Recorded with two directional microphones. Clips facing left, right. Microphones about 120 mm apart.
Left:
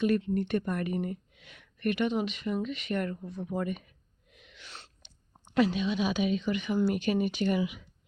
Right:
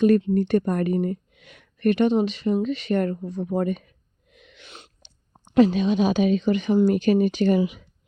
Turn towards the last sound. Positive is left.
turn(degrees=-35)  # may be behind; listen again after turning